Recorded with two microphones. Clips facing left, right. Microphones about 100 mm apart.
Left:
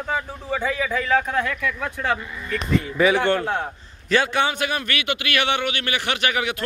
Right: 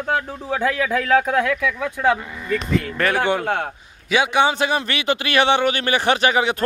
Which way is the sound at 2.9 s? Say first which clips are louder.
Left 4 dB; centre (ahead or behind).